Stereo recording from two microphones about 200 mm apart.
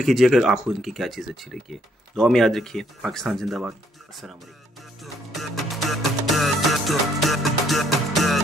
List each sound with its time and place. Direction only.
0.0 s speech: centre (ahead or behind)
5.0 s music: centre (ahead or behind)